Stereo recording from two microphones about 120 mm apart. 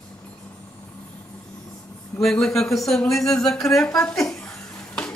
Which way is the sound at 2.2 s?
5° left (ahead or behind).